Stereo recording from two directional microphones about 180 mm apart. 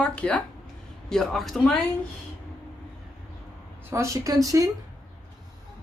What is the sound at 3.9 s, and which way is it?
Speech, 15° right (ahead or behind).